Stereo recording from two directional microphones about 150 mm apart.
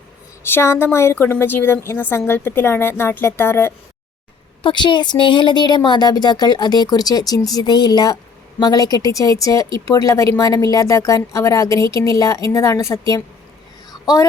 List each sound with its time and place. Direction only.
0.4 s a woman's voice: 15° left (ahead or behind)
4.6 s speech: 30° left (ahead or behind)